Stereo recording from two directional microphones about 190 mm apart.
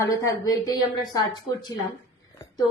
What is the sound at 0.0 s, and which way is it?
A woman's voice, 15° left (ahead or behind).